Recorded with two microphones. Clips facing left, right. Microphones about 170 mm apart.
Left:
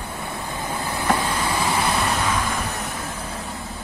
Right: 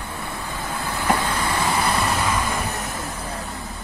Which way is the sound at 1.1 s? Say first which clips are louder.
Even; centre (ahead or behind).